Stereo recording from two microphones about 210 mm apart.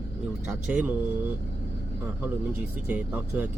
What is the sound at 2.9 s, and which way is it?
Speech, 5° right (ahead or behind).